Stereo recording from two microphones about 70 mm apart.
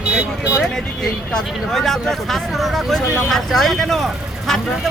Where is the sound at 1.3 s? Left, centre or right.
Centre.